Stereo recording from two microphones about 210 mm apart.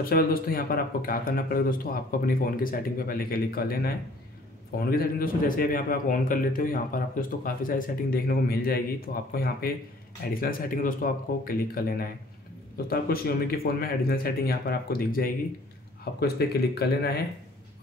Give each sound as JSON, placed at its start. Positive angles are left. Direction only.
{"t": 0.0, "sound": "a man's voice", "side_deg": 45}